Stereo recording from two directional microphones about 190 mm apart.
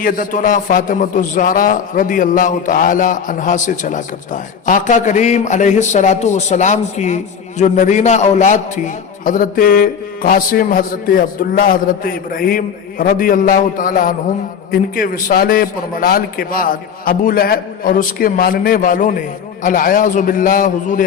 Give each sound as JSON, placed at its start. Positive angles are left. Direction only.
{"t": 0.0, "sound": "a man's voice", "side_deg": 45}